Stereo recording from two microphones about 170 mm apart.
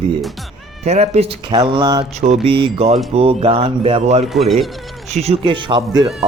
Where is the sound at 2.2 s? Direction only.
35° right (ahead or behind).